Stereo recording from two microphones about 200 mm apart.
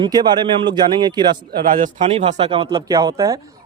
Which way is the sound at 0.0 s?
20° right (ahead or behind).